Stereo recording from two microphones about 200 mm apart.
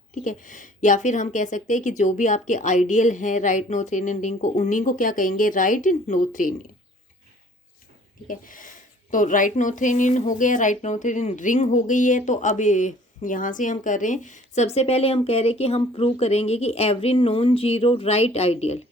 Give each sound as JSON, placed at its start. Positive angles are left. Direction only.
{"t": 0.1, "sound": "speech", "side_deg": 40}
{"t": 8.3, "sound": "speech", "side_deg": 40}